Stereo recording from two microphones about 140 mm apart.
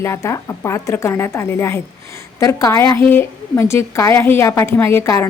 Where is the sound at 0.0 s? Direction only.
20° left (ahead or behind).